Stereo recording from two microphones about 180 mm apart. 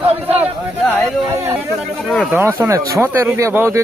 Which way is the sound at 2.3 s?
10° right (ahead or behind).